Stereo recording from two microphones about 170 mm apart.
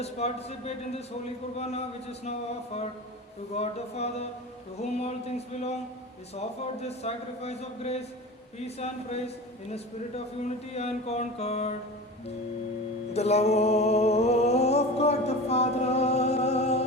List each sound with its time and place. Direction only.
0.0 s speech: 40° left (ahead or behind)
3.5 s speech: 40° left (ahead or behind)
10.7 s speech: 40° left (ahead or behind)
13.1 s music: 40° left (ahead or behind)